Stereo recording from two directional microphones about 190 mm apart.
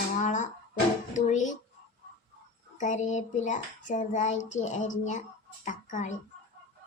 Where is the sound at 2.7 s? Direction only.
40° left (ahead or behind).